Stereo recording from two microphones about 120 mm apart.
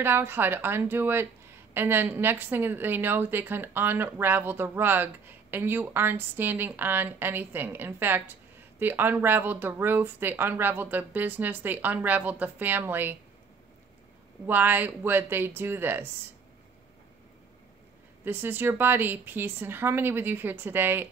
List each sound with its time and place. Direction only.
0.0 s a woman's voice: 20° right (ahead or behind)
14.4 s a woman's voice: 15° right (ahead or behind)
18.2 s a woman's voice: 15° right (ahead or behind)